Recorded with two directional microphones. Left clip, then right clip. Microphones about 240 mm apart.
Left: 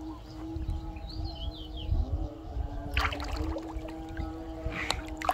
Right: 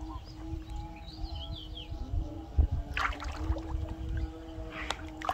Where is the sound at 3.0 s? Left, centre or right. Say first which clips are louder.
Left 1 dB; left.